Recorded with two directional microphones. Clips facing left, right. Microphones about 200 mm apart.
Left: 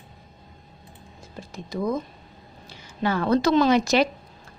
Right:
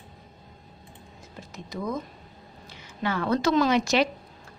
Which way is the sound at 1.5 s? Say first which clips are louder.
Left 5 dB; 30° left (ahead or behind).